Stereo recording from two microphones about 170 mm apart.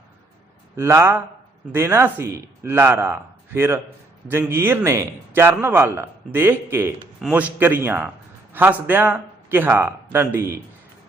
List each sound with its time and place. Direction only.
0.8 s speech: 15° right (ahead or behind)